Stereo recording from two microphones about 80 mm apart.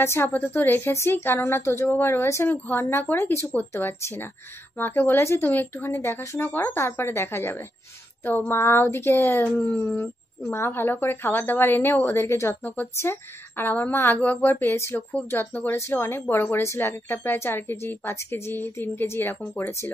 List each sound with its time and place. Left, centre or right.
0.0 s a woman's voice: left